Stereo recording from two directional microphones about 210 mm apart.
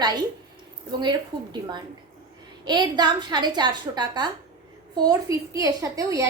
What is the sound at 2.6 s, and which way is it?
A woman's voice, 20° right (ahead or behind).